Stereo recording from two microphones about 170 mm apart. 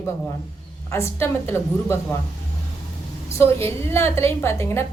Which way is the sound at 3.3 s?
15° left (ahead or behind).